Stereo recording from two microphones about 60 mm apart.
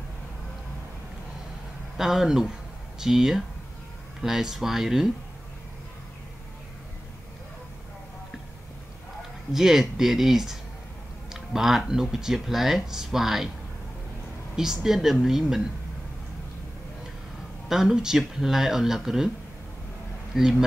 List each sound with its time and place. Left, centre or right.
2.0 s speech: centre
9.5 s speech: centre
14.5 s speech: centre
17.6 s speech: centre
20.3 s speech: centre